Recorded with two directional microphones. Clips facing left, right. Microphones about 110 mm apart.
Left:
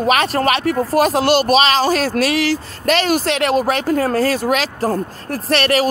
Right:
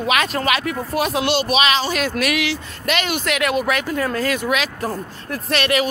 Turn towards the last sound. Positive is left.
turn(degrees=35)  # may be behind; listen again after turning